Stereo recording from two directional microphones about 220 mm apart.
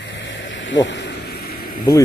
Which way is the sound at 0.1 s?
55° left (ahead or behind).